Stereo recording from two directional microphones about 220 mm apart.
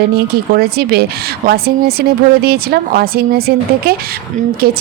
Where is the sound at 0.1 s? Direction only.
45° right (ahead or behind).